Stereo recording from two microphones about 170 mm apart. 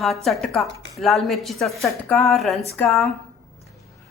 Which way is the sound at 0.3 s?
Centre (ahead or behind).